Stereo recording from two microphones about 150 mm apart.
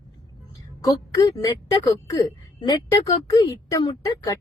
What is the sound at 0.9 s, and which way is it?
Speech, 25° left (ahead or behind).